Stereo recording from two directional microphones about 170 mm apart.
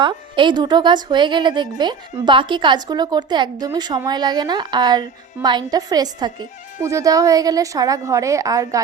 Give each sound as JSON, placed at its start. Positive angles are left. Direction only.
{"t": 0.0, "sound": "a woman's voice", "side_deg": -30}